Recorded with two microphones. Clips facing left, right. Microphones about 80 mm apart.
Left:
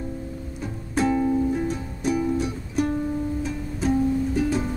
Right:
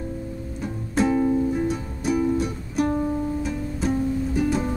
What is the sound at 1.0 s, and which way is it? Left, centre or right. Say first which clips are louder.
Music: right 1 dB; centre.